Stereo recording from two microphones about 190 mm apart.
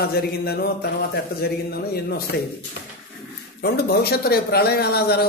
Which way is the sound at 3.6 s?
55° left (ahead or behind).